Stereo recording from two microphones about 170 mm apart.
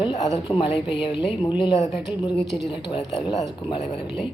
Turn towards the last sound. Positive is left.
turn(degrees=30)  # may be behind; listen again after turning